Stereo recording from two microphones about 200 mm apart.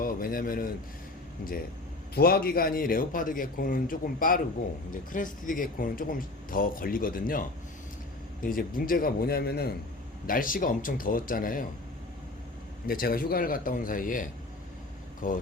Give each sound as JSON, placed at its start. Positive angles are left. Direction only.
{"t": 0.0, "sound": "speech", "side_deg": 45}
{"t": 2.1, "sound": "speech", "side_deg": 50}
{"t": 8.4, "sound": "speech", "side_deg": 45}
{"t": 12.9, "sound": "speech", "side_deg": 45}